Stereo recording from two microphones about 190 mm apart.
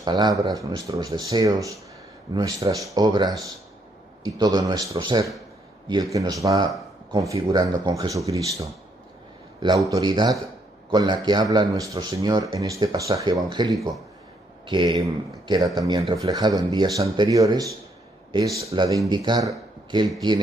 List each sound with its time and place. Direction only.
0.0 s a man's voice: 20° right (ahead or behind)
6.4 s a man's voice: 15° right (ahead or behind)
9.6 s a man's voice: 20° right (ahead or behind)